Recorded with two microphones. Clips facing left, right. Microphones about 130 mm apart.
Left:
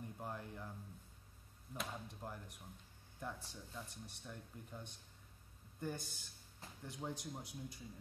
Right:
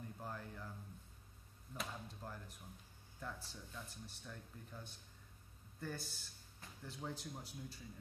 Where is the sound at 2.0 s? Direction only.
15° left (ahead or behind).